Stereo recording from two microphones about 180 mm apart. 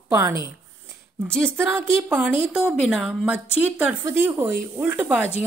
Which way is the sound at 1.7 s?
10° right (ahead or behind).